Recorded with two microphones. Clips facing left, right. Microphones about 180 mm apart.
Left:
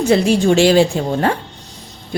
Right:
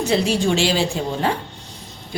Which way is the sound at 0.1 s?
50° left (ahead or behind).